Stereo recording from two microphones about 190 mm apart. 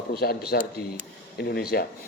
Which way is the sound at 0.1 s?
55° left (ahead or behind).